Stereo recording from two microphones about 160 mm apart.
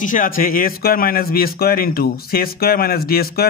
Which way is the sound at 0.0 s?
55° left (ahead or behind).